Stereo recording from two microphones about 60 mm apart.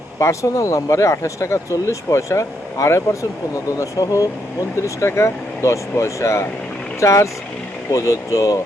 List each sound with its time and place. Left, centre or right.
0.2 s speech: left
3.8 s speech: left
4.9 s speech: left